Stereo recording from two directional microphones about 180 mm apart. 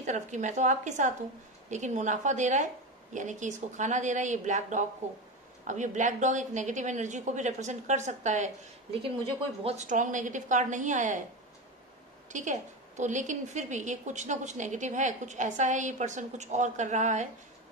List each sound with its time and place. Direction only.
0.0 s a woman's voice: 40° right (ahead or behind)
12.3 s a woman's voice: 45° right (ahead or behind)